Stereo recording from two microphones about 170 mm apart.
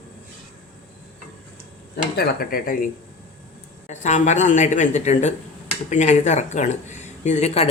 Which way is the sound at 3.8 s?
45° left (ahead or behind).